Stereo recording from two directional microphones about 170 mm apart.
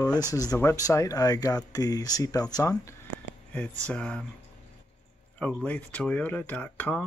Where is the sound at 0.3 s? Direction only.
20° left (ahead or behind).